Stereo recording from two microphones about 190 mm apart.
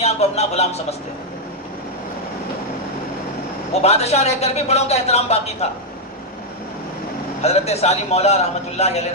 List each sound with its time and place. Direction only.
0.0 s a man's voice: 35° left (ahead or behind)
3.8 s speech: 35° left (ahead or behind)
7.4 s speech: 35° left (ahead or behind)